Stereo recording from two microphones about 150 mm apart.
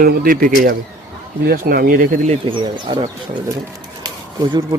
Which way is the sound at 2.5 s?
30° right (ahead or behind).